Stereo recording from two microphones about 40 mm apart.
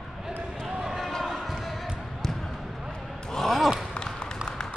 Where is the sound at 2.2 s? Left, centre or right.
Centre.